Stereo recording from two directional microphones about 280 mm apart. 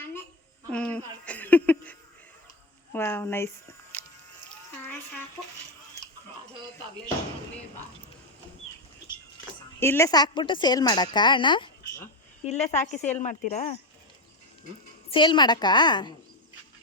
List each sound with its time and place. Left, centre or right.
0.7 s a sound: centre
2.9 s speech: centre
4.0 s music: centre
9.8 s a woman's voice: centre
15.1 s a woman's voice: centre